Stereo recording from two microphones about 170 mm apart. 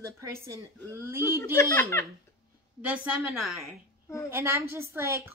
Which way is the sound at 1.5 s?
15° left (ahead or behind).